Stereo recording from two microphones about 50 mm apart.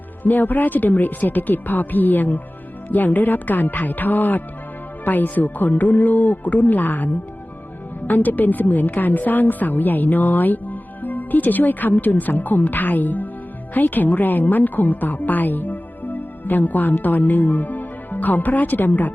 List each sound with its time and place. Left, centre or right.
0.2 s a woman's voice: left